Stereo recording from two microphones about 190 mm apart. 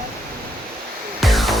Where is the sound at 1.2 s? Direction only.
Centre (ahead or behind).